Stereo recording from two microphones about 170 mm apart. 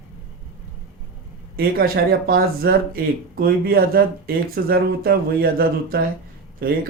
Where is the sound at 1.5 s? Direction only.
60° right (ahead or behind).